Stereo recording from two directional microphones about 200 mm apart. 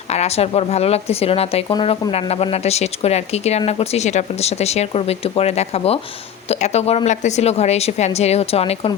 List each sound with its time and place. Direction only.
0.1 s a woman's voice: 30° left (ahead or behind)